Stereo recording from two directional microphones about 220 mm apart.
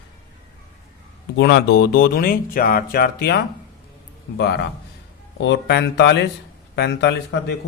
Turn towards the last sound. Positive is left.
turn(degrees=50)  # may be behind; listen again after turning